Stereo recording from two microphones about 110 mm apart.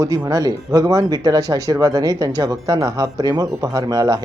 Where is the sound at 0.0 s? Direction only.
30° right (ahead or behind).